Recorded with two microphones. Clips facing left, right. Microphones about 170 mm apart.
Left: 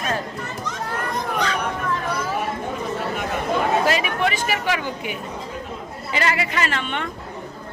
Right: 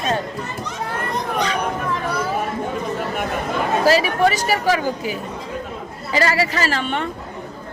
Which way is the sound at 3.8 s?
35° right (ahead or behind).